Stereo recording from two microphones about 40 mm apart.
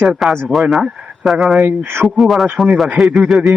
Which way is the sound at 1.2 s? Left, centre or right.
Centre.